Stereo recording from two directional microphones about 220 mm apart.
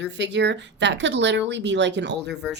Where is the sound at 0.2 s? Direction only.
55° right (ahead or behind).